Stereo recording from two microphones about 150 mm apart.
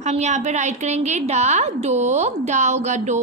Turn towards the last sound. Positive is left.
turn(degrees=-50)  # may be behind; listen again after turning